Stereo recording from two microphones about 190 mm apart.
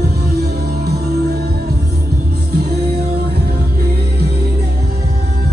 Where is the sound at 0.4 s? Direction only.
60° right (ahead or behind).